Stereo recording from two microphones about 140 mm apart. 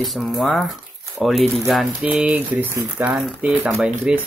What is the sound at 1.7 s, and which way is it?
Speech, centre (ahead or behind).